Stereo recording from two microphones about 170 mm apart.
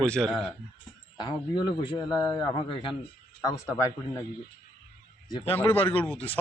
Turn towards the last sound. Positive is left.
turn(degrees=10)  # may be behind; listen again after turning